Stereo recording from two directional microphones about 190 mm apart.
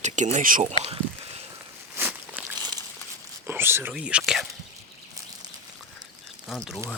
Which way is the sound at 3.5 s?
10° right (ahead or behind).